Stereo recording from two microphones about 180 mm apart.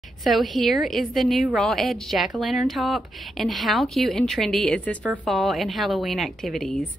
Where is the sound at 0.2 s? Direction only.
Centre (ahead or behind).